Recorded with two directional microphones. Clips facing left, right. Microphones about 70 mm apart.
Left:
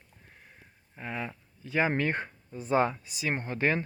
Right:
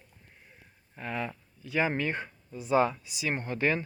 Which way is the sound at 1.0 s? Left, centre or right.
Centre.